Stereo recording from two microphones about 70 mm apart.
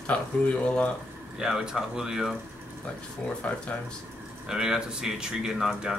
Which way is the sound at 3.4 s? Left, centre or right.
Centre.